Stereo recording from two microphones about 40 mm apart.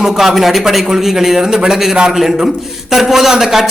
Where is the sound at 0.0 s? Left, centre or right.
Centre.